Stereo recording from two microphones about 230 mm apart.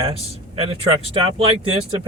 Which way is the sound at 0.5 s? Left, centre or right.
Right.